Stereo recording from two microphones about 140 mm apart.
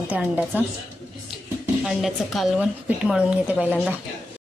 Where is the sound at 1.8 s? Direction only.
Centre (ahead or behind).